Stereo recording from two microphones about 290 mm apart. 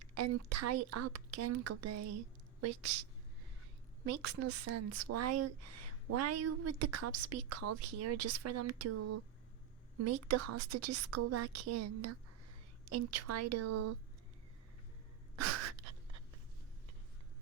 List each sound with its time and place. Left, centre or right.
0.1 s a woman's voice: right
4.1 s a woman's voice: right
15.4 s gasp: right